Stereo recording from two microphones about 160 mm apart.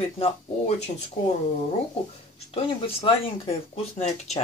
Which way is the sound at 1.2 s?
55° left (ahead or behind).